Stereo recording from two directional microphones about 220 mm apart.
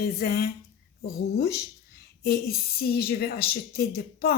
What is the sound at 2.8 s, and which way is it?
A woman's voice, 45° left (ahead or behind).